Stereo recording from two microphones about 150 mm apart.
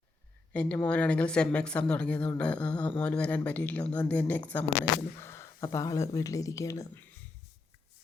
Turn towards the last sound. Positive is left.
turn(degrees=20)  # may be behind; listen again after turning